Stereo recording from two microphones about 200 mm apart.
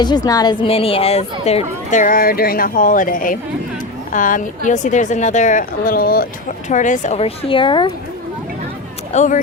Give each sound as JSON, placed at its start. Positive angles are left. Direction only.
{"t": 0.0, "sound": "speech", "side_deg": 20}
{"t": 9.1, "sound": "speech", "side_deg": 40}